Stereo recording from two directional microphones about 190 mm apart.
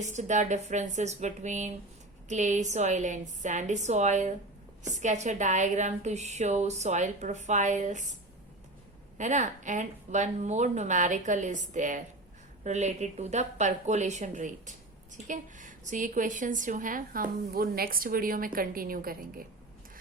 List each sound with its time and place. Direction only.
0.0 s a woman's voice: 40° right (ahead or behind)
9.1 s a woman's voice: 40° right (ahead or behind)